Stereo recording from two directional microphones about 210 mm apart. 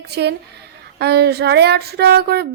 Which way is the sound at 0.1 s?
50° right (ahead or behind).